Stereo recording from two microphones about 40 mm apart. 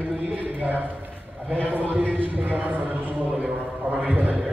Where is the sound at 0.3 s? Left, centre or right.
Right.